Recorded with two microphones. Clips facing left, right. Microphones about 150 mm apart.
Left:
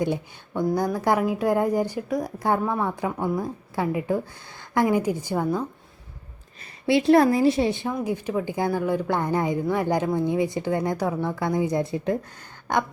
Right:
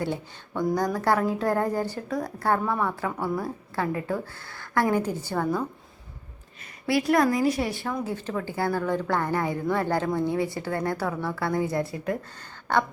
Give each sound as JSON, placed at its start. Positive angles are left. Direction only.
{"t": 0.0, "sound": "a woman's voice", "side_deg": 15}
{"t": 6.8, "sound": "a woman's voice", "side_deg": 25}